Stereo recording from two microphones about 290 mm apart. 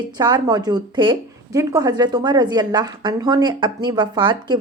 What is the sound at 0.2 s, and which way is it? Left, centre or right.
A woman's voice, centre.